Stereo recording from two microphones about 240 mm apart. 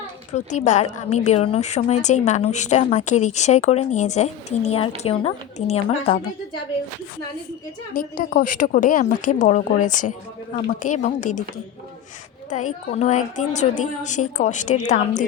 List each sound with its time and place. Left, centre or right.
0.3 s a woman's voice: left
7.9 s a woman's voice: left
12.5 s a woman's voice: left